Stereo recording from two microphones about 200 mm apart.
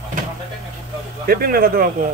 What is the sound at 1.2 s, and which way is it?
Speech, 50° right (ahead or behind).